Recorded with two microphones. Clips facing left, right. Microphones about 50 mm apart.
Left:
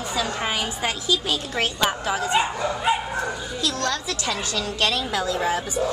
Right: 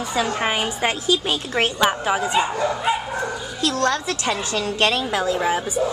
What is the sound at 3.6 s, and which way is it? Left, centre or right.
Speech, right.